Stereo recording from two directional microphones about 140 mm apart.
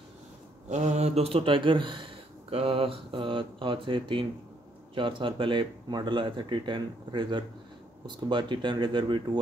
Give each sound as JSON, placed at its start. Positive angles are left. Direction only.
{"t": 0.7, "sound": "speech", "side_deg": -55}